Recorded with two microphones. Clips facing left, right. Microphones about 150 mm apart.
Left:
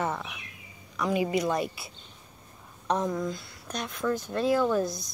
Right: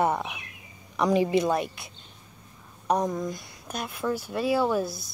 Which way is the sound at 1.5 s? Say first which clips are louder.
Right 2 dB; centre (ahead or behind).